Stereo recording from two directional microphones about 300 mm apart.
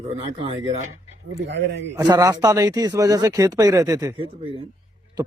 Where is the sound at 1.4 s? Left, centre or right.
Right.